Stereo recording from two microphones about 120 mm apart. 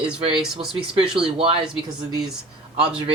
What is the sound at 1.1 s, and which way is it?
Speech, 45° right (ahead or behind).